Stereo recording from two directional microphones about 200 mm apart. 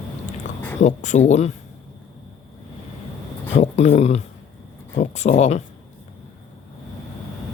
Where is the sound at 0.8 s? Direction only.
35° left (ahead or behind).